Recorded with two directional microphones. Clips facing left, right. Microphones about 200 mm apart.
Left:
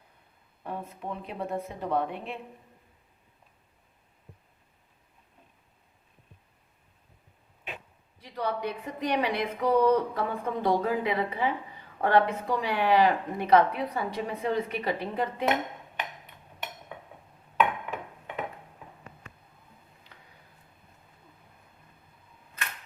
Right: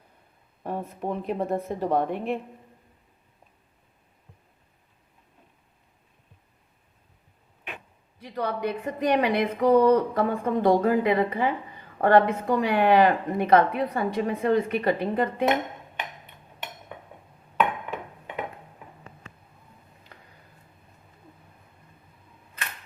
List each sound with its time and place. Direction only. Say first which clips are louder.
0.6 s speech: right 6 dB; 40° right (ahead or behind)
8.2 s speech: right 3 dB; 50° right (ahead or behind)